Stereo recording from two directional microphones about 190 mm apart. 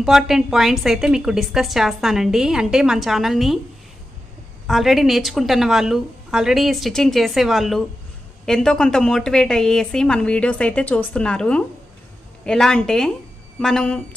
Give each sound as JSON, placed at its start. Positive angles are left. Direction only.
{"t": 0.0, "sound": "a woman's voice", "side_deg": 0}
{"t": 4.6, "sound": "a woman's voice", "side_deg": 0}